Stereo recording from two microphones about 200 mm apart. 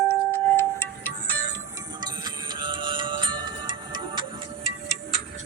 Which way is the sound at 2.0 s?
20° right (ahead or behind).